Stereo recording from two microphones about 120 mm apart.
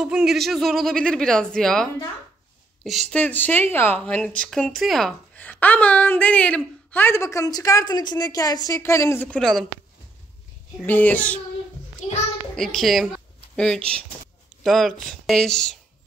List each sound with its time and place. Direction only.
0.0 s speech: 5° right (ahead or behind)
3.2 s a woman's voice: 15° left (ahead or behind)
5.3 s a woman's voice: 15° left (ahead or behind)
9.3 s speech: centre (ahead or behind)
10.9 s a woman's voice: 15° left (ahead or behind)
12.5 s speech: centre (ahead or behind)